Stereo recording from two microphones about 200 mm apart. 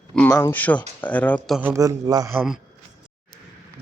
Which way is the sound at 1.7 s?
15° right (ahead or behind).